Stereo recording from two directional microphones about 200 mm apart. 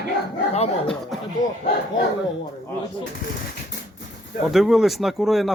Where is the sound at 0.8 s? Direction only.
Centre (ahead or behind).